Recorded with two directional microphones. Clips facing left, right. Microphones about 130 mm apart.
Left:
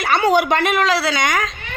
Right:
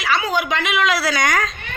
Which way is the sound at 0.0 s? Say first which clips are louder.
Left 5 dB; 65° left (ahead or behind).